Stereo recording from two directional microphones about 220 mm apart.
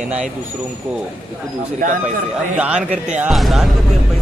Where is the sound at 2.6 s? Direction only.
5° right (ahead or behind).